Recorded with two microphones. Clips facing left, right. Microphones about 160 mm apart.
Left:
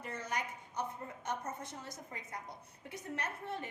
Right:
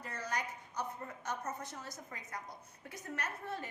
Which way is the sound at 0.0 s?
25° left (ahead or behind).